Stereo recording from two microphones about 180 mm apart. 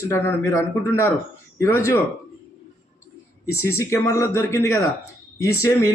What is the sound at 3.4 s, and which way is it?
Speech, 15° left (ahead or behind).